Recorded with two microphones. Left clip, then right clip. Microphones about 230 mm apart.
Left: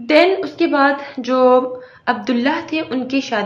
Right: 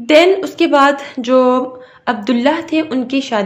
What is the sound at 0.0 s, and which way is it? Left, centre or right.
A woman's voice, right.